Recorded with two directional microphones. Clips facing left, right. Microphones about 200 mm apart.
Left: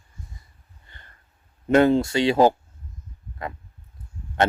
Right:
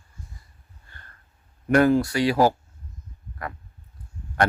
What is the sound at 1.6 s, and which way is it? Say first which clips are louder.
Speech: left 1 dB; 25° left (ahead or behind).